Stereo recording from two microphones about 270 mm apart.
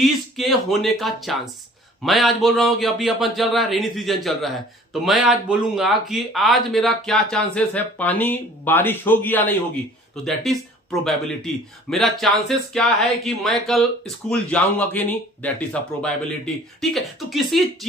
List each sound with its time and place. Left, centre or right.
0.0 s speech: centre